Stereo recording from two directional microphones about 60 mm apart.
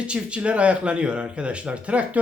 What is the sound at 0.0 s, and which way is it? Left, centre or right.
Speech, centre.